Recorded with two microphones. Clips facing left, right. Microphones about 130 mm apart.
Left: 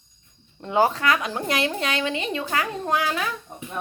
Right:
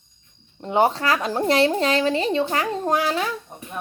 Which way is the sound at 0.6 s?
25° right (ahead or behind).